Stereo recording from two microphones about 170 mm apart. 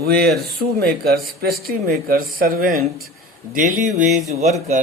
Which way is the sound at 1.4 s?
65° right (ahead or behind).